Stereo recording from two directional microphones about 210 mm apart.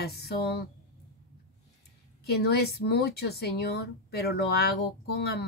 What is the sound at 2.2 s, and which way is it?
Speech, 50° left (ahead or behind).